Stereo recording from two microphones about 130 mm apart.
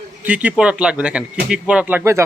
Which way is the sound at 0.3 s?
10° right (ahead or behind).